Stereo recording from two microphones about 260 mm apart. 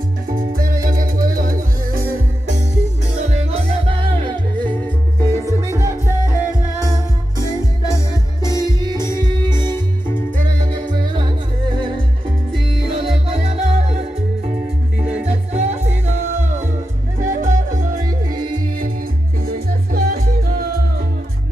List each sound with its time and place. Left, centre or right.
0.3 s music: right; by 7.4 s centre
8.5 s music: centre
8.7 s music: centre
9.0 s music: centre
10.6 s music: centre
12.9 s music: right
15.2 s music: right
17.2 s music: right
17.9 s music: centre
19.4 s music: right